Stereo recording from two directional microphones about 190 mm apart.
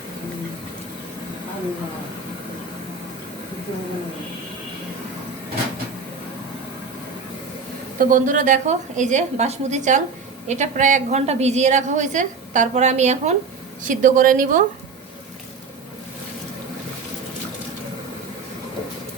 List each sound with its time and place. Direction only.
7.9 s a woman's voice: 45° right (ahead or behind)